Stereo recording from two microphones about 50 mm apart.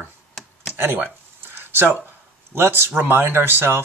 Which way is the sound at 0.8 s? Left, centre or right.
Right.